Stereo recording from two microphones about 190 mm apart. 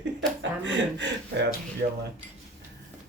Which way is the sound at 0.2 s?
65° right (ahead or behind).